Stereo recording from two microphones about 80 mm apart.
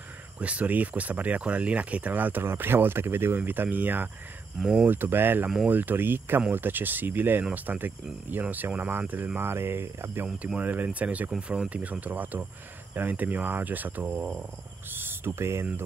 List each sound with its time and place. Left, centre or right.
0.4 s speech: centre
4.6 s speech: centre
4.8 s speech: right
10.2 s speech: centre; by 15.8 s right